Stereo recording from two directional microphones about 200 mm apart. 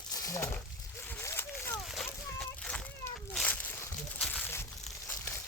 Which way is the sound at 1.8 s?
Centre (ahead or behind).